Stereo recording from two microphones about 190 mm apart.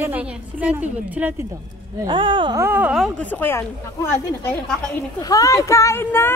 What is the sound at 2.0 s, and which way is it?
Speech, 25° right (ahead or behind).